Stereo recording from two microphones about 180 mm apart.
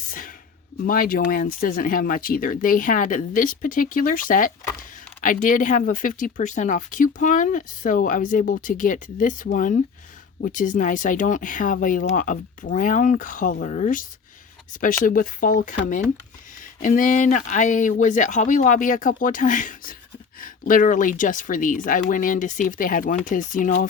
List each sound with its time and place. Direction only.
0.9 s speech: 50° left (ahead or behind)